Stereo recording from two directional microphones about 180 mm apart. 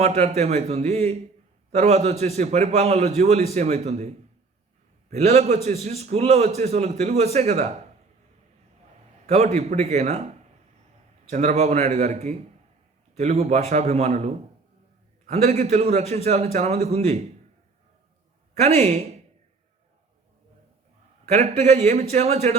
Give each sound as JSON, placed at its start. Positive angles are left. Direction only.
{"t": 0.0, "sound": "a man's voice", "side_deg": -35}
{"t": 5.1, "sound": "a man's voice", "side_deg": -40}
{"t": 9.2, "sound": "a man's voice", "side_deg": -35}
{"t": 18.6, "sound": "a man's voice", "side_deg": -35}
{"t": 21.2, "sound": "a man's voice", "side_deg": -40}